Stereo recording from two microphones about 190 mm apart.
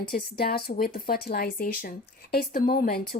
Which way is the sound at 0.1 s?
55° left (ahead or behind).